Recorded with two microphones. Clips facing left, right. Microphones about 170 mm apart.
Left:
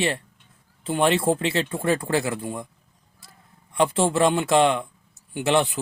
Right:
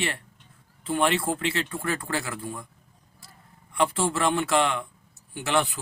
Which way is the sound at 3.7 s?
20° left (ahead or behind).